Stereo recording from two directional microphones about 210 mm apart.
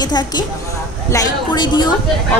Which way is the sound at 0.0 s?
20° left (ahead or behind).